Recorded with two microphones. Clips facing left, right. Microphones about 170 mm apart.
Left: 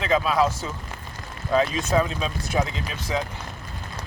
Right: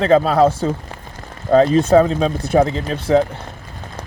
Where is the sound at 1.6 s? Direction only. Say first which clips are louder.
Right 14 dB; 30° right (ahead or behind).